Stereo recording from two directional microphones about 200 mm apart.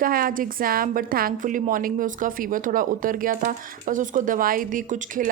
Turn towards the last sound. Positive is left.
turn(degrees=-40)  # may be behind; listen again after turning